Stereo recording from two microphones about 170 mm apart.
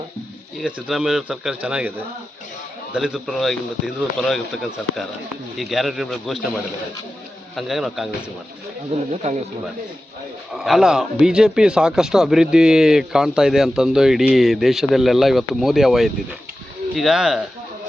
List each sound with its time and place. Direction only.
0.6 s a man's voice: centre (ahead or behind)
2.9 s a man's voice: 5° right (ahead or behind)
7.5 s a man's voice: centre (ahead or behind)
8.9 s speech: 35° right (ahead or behind)
10.5 s a man's voice: centre (ahead or behind)